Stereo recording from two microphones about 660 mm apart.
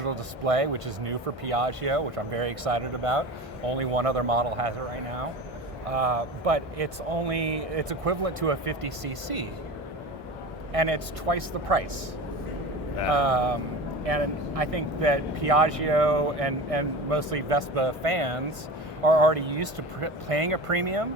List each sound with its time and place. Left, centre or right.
0.0 s speech: right
5.9 s speech: right
10.7 s speech: right
13.1 s speech: right